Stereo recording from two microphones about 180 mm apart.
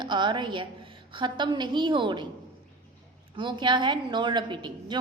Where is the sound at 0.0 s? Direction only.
25° right (ahead or behind).